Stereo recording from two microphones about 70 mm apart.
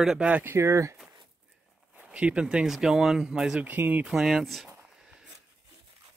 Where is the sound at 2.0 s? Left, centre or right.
Centre.